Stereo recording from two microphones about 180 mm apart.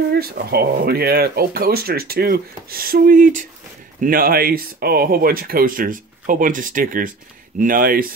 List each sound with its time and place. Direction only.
0.1 s speech: 60° right (ahead or behind)